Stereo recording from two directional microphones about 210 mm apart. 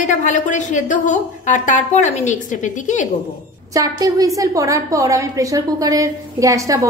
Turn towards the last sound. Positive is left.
turn(degrees=-15)  # may be behind; listen again after turning